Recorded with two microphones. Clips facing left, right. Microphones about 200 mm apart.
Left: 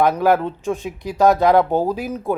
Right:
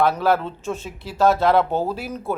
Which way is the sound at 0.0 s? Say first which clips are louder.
Left 3 dB; 15° left (ahead or behind).